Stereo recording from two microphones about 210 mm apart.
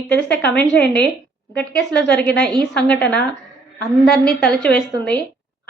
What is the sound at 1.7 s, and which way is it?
Speech, 55° left (ahead or behind).